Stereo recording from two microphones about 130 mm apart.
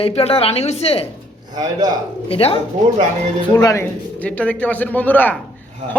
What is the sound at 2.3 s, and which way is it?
Speech, 50° left (ahead or behind).